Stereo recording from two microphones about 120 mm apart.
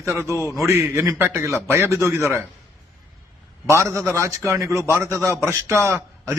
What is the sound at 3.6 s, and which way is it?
A man's voice, 25° right (ahead or behind).